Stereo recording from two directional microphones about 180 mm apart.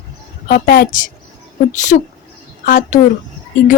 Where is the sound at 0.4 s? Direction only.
55° left (ahead or behind).